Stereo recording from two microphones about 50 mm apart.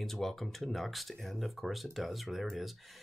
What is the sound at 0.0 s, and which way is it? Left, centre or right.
Speech, centre.